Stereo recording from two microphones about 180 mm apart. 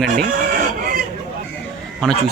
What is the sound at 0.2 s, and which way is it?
Chicken, 60° right (ahead or behind).